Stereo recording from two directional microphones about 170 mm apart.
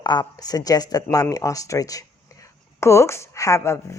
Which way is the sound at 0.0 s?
25° left (ahead or behind).